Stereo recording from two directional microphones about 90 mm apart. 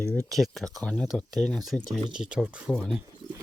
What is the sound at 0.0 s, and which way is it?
Speech, 10° left (ahead or behind).